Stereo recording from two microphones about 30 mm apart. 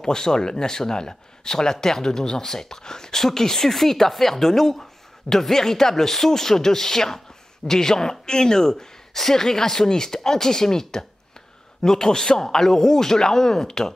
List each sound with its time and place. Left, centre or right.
0.0 s speech: left